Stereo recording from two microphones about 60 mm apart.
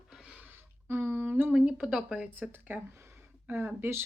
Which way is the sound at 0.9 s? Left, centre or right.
Right.